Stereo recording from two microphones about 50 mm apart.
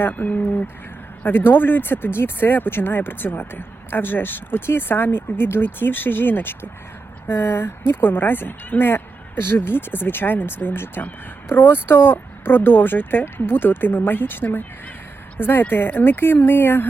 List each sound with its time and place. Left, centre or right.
0.0 s speech: left